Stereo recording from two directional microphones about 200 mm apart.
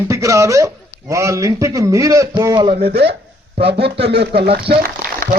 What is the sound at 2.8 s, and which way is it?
A man's voice, 50° right (ahead or behind).